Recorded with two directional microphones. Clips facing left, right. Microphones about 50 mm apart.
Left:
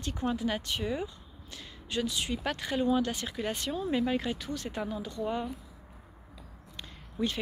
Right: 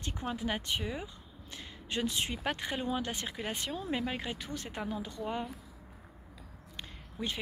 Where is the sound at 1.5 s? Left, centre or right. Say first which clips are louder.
Even; right.